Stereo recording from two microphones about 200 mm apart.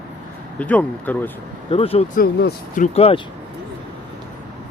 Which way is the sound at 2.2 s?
50° left (ahead or behind).